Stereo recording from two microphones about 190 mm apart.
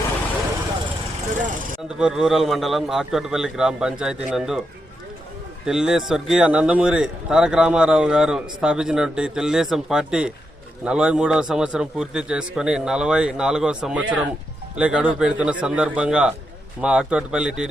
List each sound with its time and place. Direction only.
2.0 s speech: 5° right (ahead or behind)
5.6 s speech: 5° right (ahead or behind)